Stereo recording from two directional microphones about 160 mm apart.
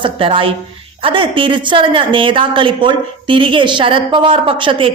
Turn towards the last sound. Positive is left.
turn(degrees=-35)  # may be behind; listen again after turning